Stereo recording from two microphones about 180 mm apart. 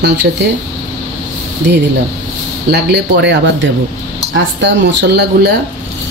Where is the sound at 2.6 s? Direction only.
70° right (ahead or behind).